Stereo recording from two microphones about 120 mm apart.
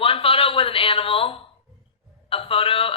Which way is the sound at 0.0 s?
50° left (ahead or behind).